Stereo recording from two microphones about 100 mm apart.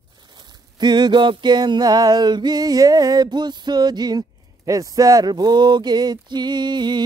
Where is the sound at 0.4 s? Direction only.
45° right (ahead or behind).